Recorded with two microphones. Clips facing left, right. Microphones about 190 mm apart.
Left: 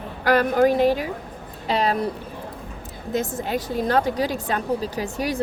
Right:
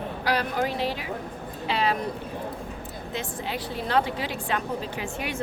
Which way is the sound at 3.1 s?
45° left (ahead or behind).